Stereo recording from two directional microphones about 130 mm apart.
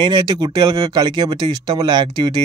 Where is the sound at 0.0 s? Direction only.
35° right (ahead or behind).